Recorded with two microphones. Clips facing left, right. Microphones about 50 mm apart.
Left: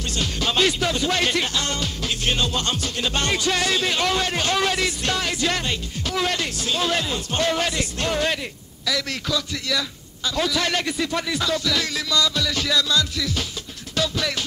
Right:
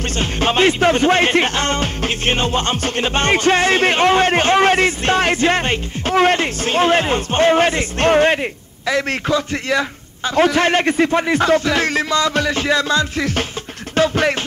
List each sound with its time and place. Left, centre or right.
0.1 s speech: right
13.9 s music: right